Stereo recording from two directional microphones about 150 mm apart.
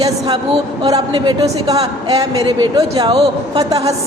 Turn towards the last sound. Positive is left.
turn(degrees=-25)  # may be behind; listen again after turning